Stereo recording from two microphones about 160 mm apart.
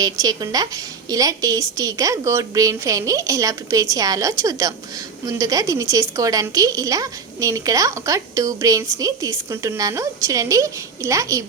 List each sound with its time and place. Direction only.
0.0 s a woman's voice: 25° right (ahead or behind)